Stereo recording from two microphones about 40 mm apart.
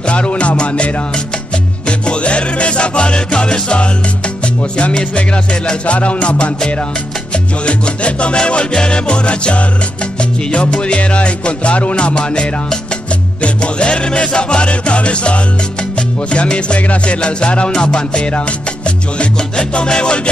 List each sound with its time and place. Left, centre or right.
0.0 s music: left